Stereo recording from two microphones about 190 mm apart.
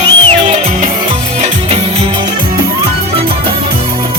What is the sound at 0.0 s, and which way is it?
Music, 35° right (ahead or behind).